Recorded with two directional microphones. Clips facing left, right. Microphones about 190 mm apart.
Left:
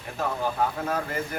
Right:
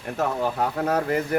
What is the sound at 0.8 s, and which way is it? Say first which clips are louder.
Speech: right 6 dB; 70° right (ahead or behind).